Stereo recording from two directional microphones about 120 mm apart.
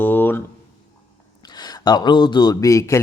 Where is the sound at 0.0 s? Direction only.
15° left (ahead or behind).